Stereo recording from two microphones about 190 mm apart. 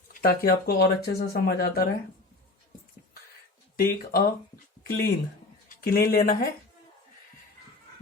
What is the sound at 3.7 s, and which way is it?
Speech, 50° left (ahead or behind).